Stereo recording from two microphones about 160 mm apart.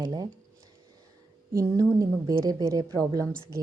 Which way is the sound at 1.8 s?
20° right (ahead or behind).